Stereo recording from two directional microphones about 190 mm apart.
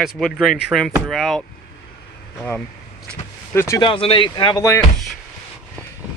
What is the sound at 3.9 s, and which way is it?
Speech, 30° left (ahead or behind).